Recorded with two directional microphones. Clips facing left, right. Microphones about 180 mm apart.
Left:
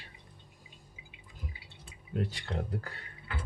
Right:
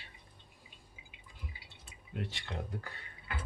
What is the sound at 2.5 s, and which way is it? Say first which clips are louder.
Speech: left 5 dB; 30° left (ahead or behind).